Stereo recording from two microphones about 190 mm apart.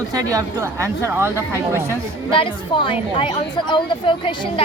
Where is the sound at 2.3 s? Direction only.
25° left (ahead or behind).